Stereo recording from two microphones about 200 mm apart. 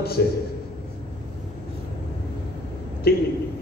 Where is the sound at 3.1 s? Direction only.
50° left (ahead or behind).